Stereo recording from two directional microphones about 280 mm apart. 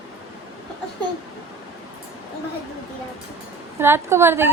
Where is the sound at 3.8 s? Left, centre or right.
Centre.